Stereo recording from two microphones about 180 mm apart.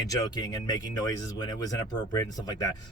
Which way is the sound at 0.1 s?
20° left (ahead or behind).